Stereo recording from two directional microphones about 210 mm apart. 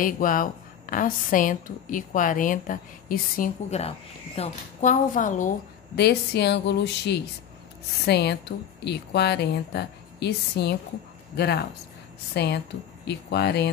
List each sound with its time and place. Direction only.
0.0 s a woman's voice: 40° left (ahead or behind)
5.9 s speech: 50° left (ahead or behind)